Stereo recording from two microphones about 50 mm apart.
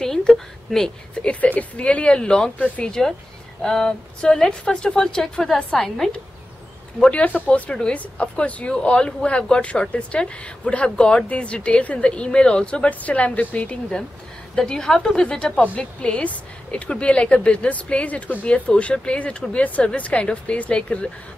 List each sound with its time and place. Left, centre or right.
0.0 s a woman's voice: centre
1.3 s a woman's voice: left
7.0 s a woman's voice: left
13.0 s a woman's voice: left
14.5 s a woman's voice: centre